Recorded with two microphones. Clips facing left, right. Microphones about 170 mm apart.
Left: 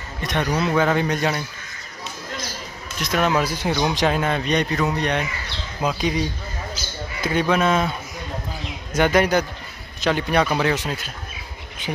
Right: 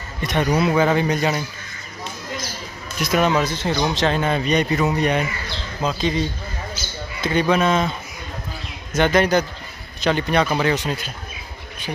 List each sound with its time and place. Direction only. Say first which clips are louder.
0.2 s a man's voice: right 3 dB; centre (ahead or behind)
3.0 s speech: right 3 dB; 5° right (ahead or behind)
3.3 s speech: right 1 dB; 10° left (ahead or behind)
4.2 s speech: right 2 dB; centre (ahead or behind)
5.8 s speech: right 1 dB; 10° left (ahead or behind)
8.9 s speech: right 1 dB; 10° left (ahead or behind)